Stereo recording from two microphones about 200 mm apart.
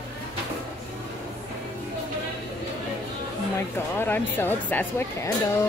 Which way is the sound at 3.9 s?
10° left (ahead or behind).